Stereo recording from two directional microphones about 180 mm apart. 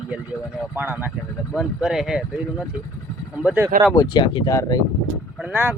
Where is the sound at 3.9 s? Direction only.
20° left (ahead or behind).